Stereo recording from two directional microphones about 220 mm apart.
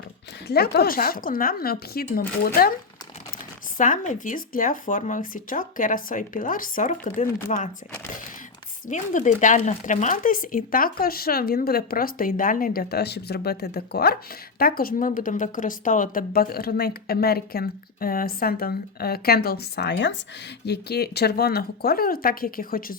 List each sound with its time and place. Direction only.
0.4 s a woman's voice: 45° left (ahead or behind)
3.8 s speech: 35° left (ahead or behind)
8.9 s a woman's voice: 35° left (ahead or behind)